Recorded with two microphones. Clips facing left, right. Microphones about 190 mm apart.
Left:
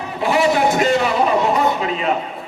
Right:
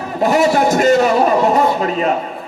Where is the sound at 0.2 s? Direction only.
45° right (ahead or behind).